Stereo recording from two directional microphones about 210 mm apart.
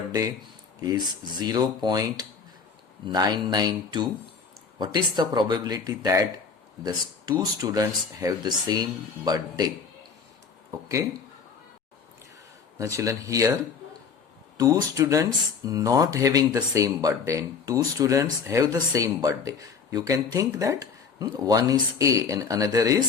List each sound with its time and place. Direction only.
0.9 s speech: 20° right (ahead or behind)
12.8 s speech: 15° right (ahead or behind)
14.6 s speech: 15° right (ahead or behind)